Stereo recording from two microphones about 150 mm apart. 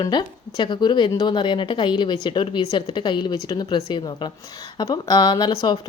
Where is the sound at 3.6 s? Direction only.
35° left (ahead or behind).